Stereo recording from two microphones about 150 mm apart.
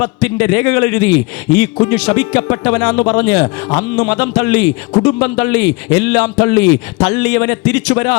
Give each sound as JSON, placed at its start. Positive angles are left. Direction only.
{"t": 0.0, "sound": "a man's voice", "side_deg": 25}